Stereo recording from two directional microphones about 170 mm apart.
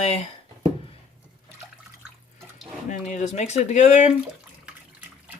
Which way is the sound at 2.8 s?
45° left (ahead or behind).